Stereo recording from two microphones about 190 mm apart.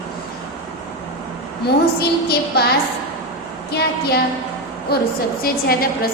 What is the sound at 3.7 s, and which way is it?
A woman's voice, 55° left (ahead or behind).